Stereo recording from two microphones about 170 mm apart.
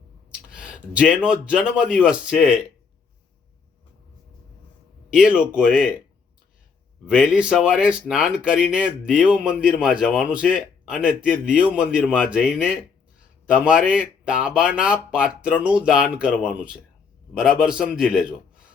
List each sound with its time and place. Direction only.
0.5 s speech: 5° right (ahead or behind)
5.1 s speech: 5° right (ahead or behind)
7.1 s a man's voice: 5° right (ahead or behind)